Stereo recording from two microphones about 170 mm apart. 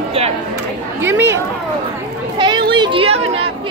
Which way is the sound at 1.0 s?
15° right (ahead or behind).